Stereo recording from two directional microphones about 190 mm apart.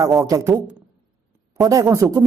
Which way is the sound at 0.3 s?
15° right (ahead or behind).